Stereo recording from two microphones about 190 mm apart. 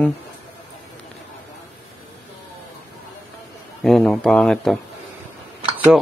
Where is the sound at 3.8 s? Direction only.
Centre (ahead or behind).